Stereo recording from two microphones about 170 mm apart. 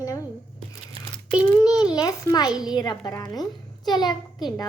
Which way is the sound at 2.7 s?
25° left (ahead or behind).